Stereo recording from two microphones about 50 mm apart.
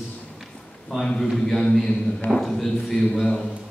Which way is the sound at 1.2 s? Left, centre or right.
Centre.